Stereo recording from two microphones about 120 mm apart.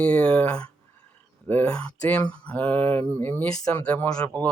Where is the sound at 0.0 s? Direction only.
10° left (ahead or behind).